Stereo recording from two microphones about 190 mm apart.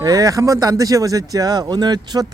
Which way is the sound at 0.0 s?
20° right (ahead or behind).